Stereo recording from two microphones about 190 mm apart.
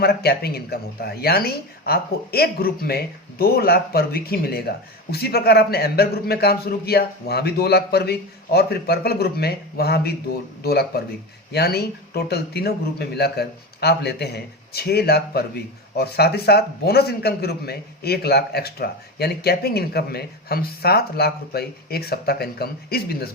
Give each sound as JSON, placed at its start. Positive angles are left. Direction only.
{"t": 0.0, "sound": "speech", "side_deg": 55}